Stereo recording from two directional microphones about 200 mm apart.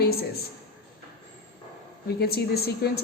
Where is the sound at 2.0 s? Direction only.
50° left (ahead or behind).